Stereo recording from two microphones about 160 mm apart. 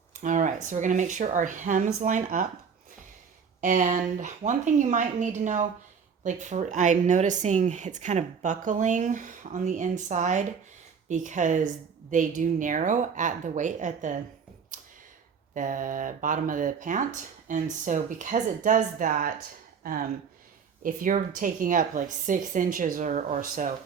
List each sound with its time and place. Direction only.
0.1 s speech: 50° right (ahead or behind)
3.6 s speech: 55° right (ahead or behind)
14.7 s a sound: 55° right (ahead or behind)
15.5 s speech: 55° right (ahead or behind)